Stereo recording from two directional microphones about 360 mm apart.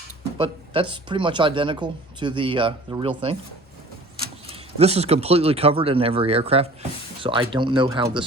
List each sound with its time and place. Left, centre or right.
0.3 s speech: centre
4.4 s speech: centre